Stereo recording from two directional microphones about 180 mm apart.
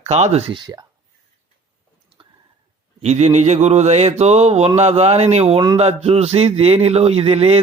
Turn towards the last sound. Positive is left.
turn(degrees=-35)  # may be behind; listen again after turning